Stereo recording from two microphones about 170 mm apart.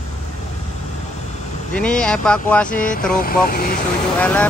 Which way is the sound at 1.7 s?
5° left (ahead or behind).